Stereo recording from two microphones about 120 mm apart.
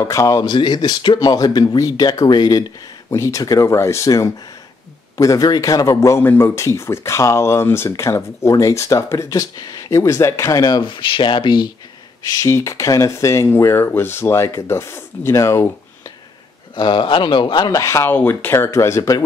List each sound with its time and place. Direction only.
0.0 s speech: 25° left (ahead or behind)
0.5 s speech: 40° left (ahead or behind)
3.1 s speech: 25° left (ahead or behind); by 11.7 s 40° left (ahead or behind)
12.4 s speech: 25° left (ahead or behind)
16.7 s speech: 40° left (ahead or behind)